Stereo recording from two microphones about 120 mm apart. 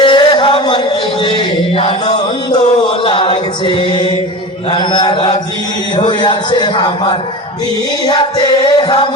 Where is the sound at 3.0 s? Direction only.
45° left (ahead or behind).